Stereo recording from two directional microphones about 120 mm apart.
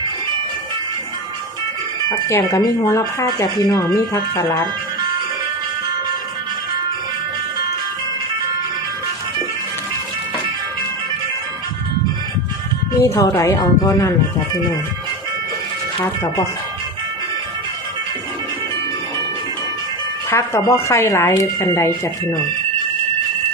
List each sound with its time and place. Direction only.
2.0 s speech: 25° left (ahead or behind)
13.0 s speech: 25° left (ahead or behind)
20.3 s speech: 20° left (ahead or behind)